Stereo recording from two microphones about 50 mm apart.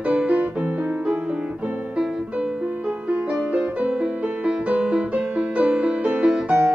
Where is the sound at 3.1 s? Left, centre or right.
Right.